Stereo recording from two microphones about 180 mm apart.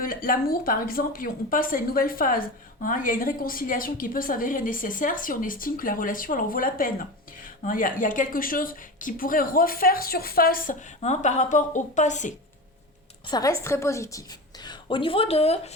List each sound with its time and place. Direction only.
0.0 s speech: 50° left (ahead or behind)
13.2 s a woman's voice: 20° left (ahead or behind); by 15.7 s 35° left (ahead or behind)